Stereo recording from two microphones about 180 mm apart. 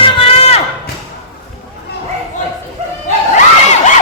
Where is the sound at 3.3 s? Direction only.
40° left (ahead or behind).